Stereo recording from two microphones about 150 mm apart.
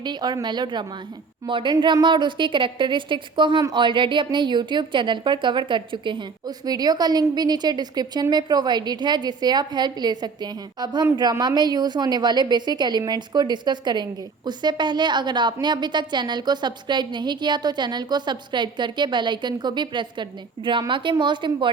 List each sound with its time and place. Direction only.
0.0 s a woman's voice: 30° right (ahead or behind)